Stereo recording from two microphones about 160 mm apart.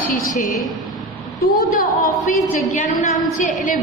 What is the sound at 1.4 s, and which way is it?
A woman's voice, 60° left (ahead or behind).